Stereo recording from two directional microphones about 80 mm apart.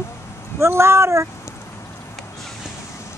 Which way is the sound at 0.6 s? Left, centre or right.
Right.